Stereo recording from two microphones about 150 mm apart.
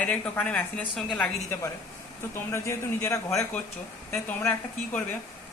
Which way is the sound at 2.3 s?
15° left (ahead or behind).